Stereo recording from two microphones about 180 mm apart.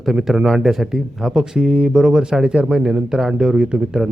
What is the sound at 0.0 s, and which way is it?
Speech, centre (ahead or behind).